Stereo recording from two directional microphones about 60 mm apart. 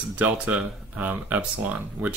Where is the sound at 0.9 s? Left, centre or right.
Right.